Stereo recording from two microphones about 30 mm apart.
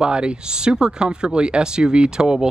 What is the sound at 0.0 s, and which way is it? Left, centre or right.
Speech, right.